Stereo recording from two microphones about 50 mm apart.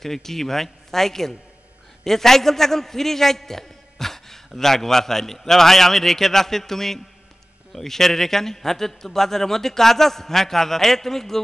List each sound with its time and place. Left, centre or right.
0.0 s a man's voice: centre